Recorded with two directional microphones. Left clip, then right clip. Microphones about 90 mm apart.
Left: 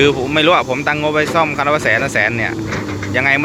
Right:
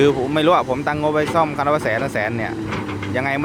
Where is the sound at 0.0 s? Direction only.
35° right (ahead or behind).